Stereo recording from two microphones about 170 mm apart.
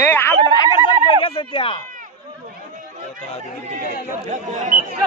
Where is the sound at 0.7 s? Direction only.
30° left (ahead or behind).